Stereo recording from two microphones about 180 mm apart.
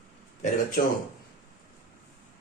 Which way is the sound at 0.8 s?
55° left (ahead or behind).